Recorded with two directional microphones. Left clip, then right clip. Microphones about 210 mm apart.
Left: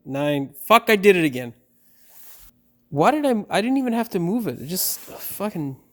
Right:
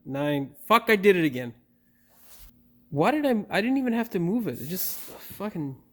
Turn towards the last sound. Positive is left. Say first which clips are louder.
# left 6 dB
turn(degrees=35)  # may be behind; listen again after turning